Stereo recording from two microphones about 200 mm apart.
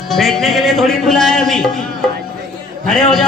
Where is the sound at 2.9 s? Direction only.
Centre (ahead or behind).